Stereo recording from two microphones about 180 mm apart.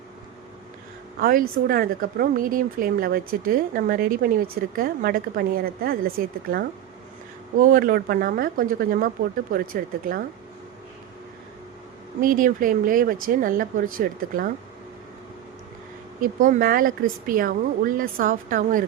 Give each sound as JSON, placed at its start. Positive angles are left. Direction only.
{"t": 1.2, "sound": "speech", "side_deg": -55}
{"t": 12.2, "sound": "speech", "side_deg": -50}
{"t": 16.2, "sound": "speech", "side_deg": -50}